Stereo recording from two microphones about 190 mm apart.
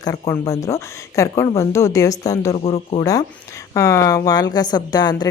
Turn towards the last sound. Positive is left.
turn(degrees=20)  # may be behind; listen again after turning